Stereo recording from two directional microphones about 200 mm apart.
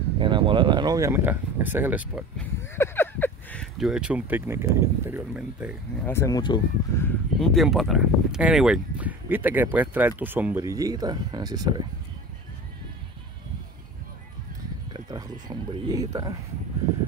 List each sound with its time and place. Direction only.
0.2 s speech: 25° right (ahead or behind); by 2.2 s 10° right (ahead or behind)
2.3 s speech: 10° left (ahead or behind); by 5.8 s 5° right (ahead or behind)
6.0 s speech: 15° left (ahead or behind)
7.0 s speech: 5° left (ahead or behind); by 11.8 s 20° right (ahead or behind)
14.9 s a sound: 20° right (ahead or behind)